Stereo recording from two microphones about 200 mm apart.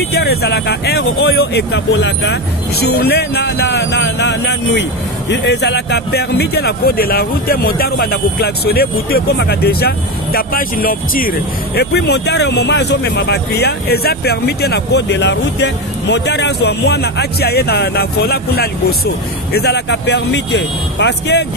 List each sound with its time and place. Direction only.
0.1 s speech: 55° left (ahead or behind)